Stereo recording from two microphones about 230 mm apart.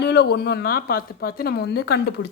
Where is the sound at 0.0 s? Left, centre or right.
Left.